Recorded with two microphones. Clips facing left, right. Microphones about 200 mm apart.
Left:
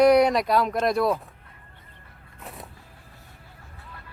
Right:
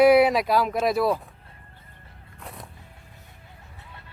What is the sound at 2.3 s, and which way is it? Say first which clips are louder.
Vehicle: left 1 dB; centre (ahead or behind).